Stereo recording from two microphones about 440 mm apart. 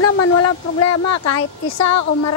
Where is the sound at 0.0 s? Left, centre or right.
Left.